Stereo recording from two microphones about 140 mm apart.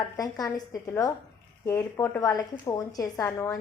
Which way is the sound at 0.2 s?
25° left (ahead or behind).